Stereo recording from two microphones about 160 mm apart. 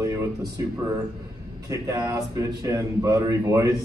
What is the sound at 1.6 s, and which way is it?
A man's voice, 20° right (ahead or behind).